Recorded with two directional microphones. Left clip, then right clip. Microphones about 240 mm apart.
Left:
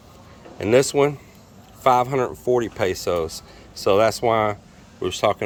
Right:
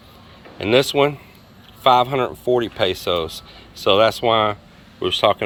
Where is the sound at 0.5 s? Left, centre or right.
Centre.